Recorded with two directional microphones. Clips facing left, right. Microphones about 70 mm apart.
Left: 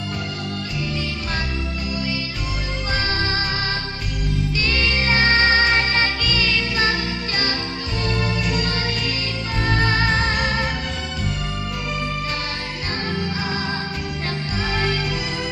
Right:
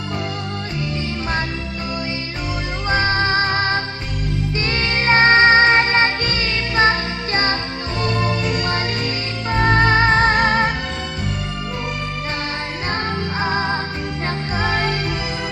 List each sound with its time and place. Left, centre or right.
2.8 s music: right
8.6 s music: right
12.9 s music: right